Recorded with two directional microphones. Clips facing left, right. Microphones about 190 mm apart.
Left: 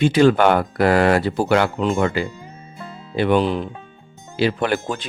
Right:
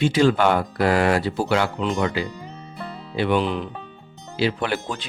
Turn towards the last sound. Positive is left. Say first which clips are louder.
# left 4 dB
turn(degrees=50)  # may be behind; listen again after turning